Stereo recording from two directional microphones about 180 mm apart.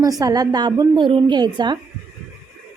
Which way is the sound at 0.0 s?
20° right (ahead or behind).